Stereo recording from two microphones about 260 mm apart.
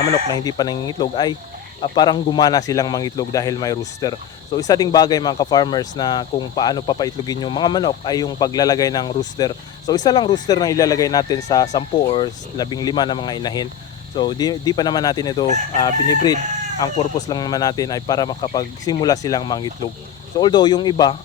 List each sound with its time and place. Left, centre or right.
0.1 s speech: centre